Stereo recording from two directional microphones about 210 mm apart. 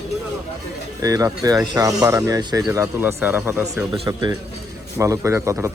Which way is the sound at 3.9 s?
20° right (ahead or behind).